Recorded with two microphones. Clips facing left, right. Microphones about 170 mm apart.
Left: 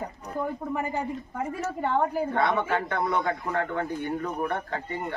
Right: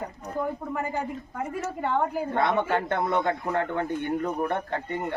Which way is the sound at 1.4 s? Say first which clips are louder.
Even; 10° right (ahead or behind).